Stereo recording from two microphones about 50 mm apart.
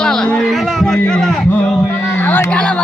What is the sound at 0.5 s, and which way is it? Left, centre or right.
Speech, centre.